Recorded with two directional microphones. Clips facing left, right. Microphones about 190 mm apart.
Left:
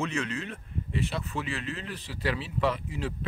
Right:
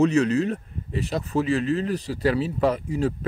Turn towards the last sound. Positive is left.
turn(degrees=-40)  # may be behind; listen again after turning